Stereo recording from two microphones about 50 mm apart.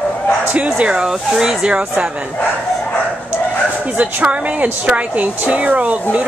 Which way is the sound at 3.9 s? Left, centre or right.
Right.